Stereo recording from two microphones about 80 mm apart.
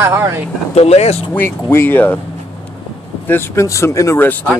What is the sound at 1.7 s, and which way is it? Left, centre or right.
Speech, left.